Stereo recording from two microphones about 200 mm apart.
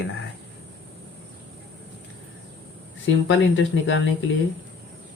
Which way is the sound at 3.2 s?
75° left (ahead or behind).